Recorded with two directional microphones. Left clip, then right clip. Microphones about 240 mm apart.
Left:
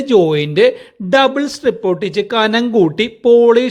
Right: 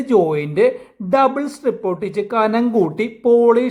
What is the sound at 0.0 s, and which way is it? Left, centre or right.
Speech, centre.